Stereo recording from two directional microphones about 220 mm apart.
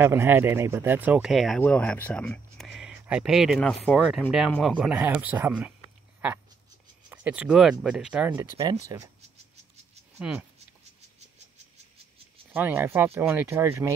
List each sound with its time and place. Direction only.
0.0 s speech: 10° right (ahead or behind)
7.1 s speech: 5° right (ahead or behind)
8.3 s speech: 15° right (ahead or behind)
10.1 s speech: 5° right (ahead or behind)
10.8 s insect: 30° right (ahead or behind)
12.5 s speech: 10° right (ahead or behind)